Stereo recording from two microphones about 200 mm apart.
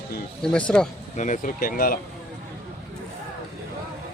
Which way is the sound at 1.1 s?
40° left (ahead or behind).